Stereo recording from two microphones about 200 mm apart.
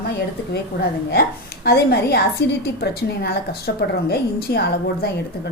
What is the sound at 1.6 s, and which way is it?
A woman's voice, 55° left (ahead or behind).